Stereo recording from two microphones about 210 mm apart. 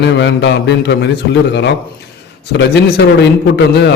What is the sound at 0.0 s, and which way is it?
A man's voice, 55° left (ahead or behind).